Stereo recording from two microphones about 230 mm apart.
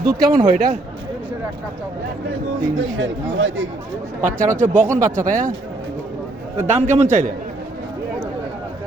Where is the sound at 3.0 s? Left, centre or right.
Right.